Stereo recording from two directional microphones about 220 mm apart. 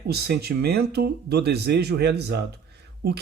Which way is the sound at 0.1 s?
45° right (ahead or behind).